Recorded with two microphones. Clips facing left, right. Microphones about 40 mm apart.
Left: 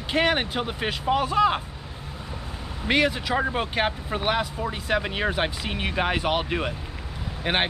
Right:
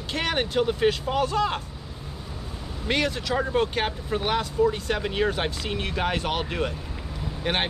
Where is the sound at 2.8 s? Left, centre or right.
Centre.